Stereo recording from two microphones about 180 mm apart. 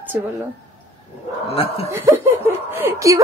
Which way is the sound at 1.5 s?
35° left (ahead or behind).